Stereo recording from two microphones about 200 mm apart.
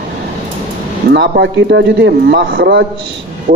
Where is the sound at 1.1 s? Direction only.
60° right (ahead or behind).